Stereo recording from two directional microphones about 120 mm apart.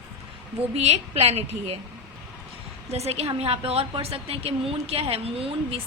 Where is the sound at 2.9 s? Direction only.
60° right (ahead or behind).